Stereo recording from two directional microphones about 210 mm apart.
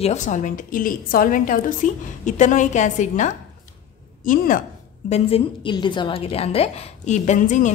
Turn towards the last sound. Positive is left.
turn(degrees=35)  # may be behind; listen again after turning